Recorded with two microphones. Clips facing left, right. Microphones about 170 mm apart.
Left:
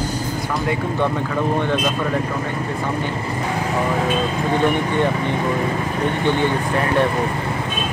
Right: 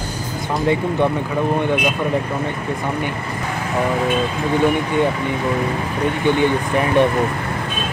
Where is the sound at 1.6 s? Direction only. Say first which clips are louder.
Right 2 dB; 15° right (ahead or behind).